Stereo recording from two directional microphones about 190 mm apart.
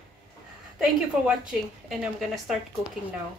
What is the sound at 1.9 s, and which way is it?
Speech, centre (ahead or behind).